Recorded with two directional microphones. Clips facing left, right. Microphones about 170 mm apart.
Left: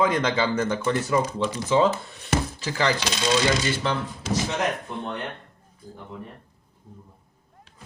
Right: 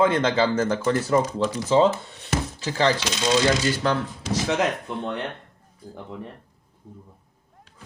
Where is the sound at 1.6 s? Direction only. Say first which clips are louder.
Right 2 dB; 25° right (ahead or behind).